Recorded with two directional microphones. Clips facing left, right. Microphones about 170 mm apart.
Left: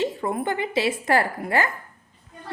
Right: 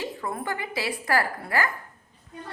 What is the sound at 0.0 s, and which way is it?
A woman's voice, 25° left (ahead or behind).